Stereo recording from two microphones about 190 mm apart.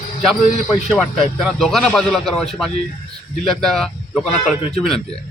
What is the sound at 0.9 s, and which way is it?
Speech, 5° left (ahead or behind).